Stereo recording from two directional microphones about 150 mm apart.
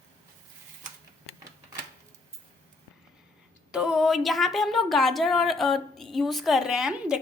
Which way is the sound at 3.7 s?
5° right (ahead or behind).